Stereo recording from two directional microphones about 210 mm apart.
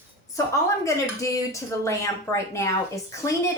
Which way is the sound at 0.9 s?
15° left (ahead or behind).